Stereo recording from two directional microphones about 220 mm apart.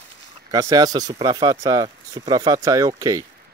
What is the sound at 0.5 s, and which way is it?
Speech, 15° right (ahead or behind).